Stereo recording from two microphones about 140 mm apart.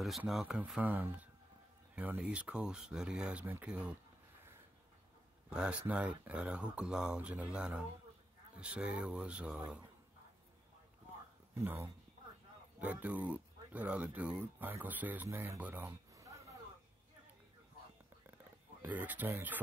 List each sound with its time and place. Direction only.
0.3 s speech: 5° right (ahead or behind)
5.5 s speech: 5° right (ahead or behind)
11.5 s speech: 15° right (ahead or behind)
18.8 s speech: 10° right (ahead or behind)